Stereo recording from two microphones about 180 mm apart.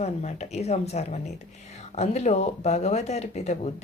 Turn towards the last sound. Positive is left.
turn(degrees=40)  # may be behind; listen again after turning